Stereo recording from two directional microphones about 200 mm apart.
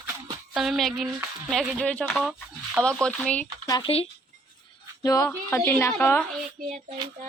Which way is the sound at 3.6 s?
25° left (ahead or behind).